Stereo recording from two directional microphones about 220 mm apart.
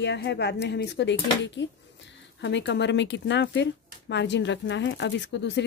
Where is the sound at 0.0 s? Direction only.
50° left (ahead or behind).